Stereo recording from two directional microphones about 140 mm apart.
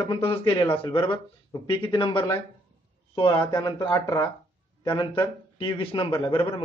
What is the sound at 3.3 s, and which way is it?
A man's voice, 30° left (ahead or behind).